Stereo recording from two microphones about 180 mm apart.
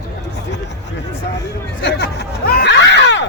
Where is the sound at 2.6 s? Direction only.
75° left (ahead or behind).